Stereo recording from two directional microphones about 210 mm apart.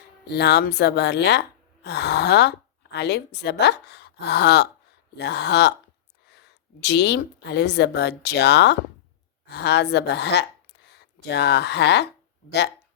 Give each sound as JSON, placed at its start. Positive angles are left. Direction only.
{"t": 0.3, "sound": "a woman's voice", "side_deg": 50}